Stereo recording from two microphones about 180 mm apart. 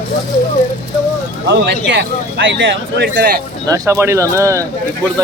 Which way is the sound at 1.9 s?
85° right.